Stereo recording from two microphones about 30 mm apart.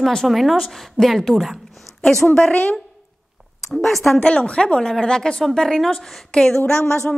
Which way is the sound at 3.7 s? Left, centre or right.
Centre.